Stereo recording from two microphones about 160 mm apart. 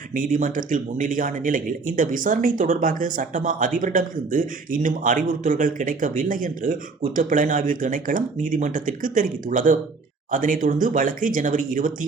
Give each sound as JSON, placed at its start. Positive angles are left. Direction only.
{"t": 0.1, "sound": "speech", "side_deg": -55}